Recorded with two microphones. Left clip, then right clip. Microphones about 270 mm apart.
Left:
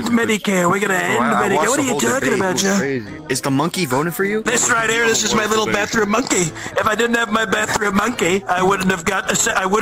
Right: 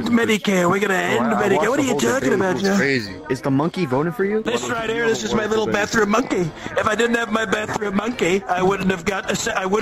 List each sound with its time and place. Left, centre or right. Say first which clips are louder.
0.1 s a man's voice: even; centre
3.4 s speech: left 2 dB; left
4.5 s a man's voice: left 6 dB; left
5.8 s a man's voice: left 1 dB; centre